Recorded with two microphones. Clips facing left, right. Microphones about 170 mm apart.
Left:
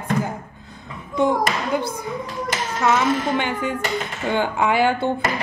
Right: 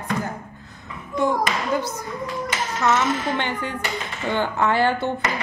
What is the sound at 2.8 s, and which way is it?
Speech, 10° left (ahead or behind).